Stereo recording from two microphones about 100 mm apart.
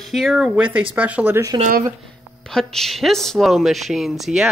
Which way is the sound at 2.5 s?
5° left (ahead or behind).